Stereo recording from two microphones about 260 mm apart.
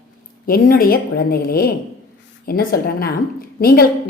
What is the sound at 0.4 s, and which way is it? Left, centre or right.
A woman's voice, left.